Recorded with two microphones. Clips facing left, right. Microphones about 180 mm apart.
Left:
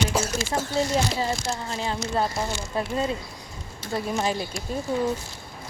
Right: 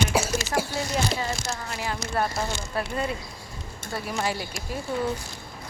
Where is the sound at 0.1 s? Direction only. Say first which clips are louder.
Right 1 dB; 10° right (ahead or behind).